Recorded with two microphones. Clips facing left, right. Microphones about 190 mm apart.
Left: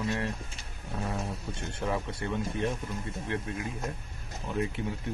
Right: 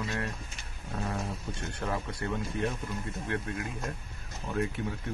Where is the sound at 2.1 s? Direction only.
25° left (ahead or behind).